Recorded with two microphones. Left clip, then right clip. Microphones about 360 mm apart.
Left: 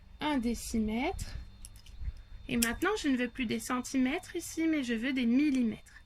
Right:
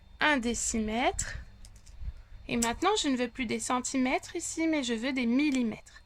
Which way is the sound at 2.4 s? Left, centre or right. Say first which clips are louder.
Right 3 dB; centre.